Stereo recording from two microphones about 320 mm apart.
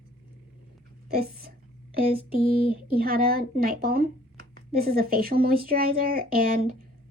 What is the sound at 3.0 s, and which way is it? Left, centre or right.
Speech, right.